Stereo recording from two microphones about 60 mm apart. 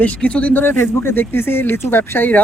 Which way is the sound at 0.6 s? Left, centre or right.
Left.